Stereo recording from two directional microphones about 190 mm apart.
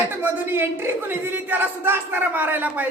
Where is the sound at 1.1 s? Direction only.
10° right (ahead or behind).